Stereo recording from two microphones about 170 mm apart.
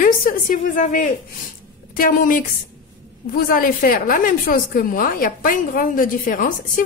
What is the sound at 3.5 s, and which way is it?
A woman's voice, 55° left (ahead or behind).